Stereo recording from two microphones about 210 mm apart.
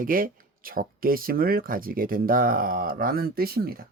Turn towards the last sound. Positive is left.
turn(degrees=-45)  # may be behind; listen again after turning